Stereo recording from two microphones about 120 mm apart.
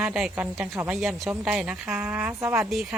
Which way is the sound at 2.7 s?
Centre (ahead or behind).